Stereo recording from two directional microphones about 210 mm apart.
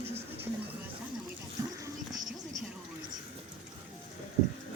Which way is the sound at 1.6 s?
15° right (ahead or behind).